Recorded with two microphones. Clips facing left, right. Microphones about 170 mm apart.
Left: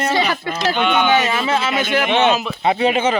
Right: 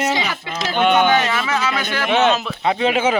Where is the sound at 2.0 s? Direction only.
Centre (ahead or behind).